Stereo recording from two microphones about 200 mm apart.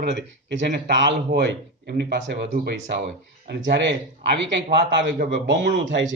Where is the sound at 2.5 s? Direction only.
40° right (ahead or behind).